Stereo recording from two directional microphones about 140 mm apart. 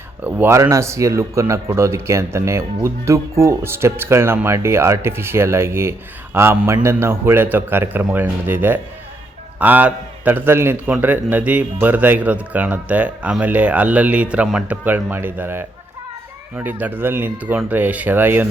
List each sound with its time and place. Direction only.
0.3 s speech: 15° right (ahead or behind)